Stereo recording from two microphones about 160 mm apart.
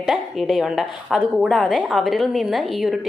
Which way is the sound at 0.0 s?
Centre (ahead or behind).